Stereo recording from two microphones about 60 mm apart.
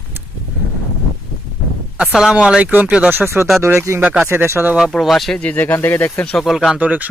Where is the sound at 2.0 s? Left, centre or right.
Centre.